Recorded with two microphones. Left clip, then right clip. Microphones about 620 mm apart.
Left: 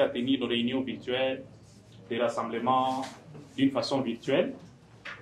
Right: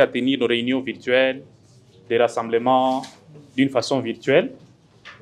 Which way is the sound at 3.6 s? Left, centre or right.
Right.